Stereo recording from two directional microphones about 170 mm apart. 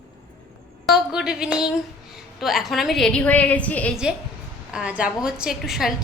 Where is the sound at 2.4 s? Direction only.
Centre (ahead or behind).